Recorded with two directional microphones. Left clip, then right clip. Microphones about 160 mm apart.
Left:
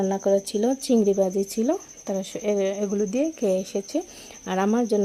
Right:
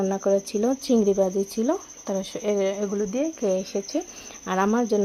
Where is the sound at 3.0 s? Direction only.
30° left (ahead or behind).